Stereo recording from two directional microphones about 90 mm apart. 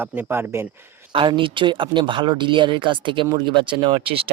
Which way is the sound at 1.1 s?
70° right (ahead or behind).